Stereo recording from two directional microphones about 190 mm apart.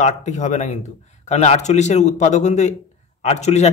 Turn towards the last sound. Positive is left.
turn(degrees=35)  # may be behind; listen again after turning